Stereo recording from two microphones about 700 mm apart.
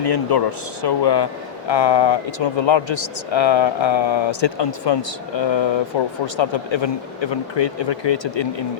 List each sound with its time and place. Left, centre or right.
0.0 s speech: left